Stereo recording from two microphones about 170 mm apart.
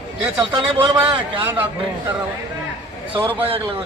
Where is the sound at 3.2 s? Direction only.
30° right (ahead or behind).